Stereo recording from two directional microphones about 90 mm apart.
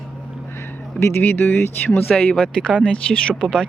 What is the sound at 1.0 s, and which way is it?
A woman's voice, 25° left (ahead or behind).